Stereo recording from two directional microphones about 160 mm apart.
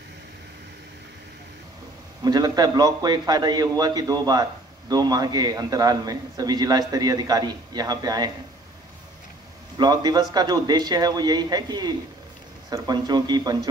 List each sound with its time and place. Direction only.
2.2 s a man's voice: 25° right (ahead or behind)
9.8 s a man's voice: 25° right (ahead or behind)